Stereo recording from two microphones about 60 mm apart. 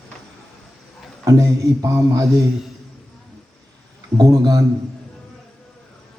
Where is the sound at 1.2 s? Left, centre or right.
Right.